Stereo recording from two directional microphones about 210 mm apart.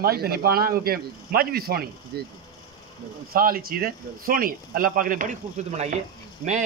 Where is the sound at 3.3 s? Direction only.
45° right (ahead or behind).